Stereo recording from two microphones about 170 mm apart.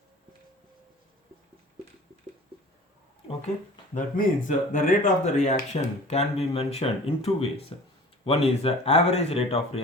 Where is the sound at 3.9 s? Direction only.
50° left (ahead or behind).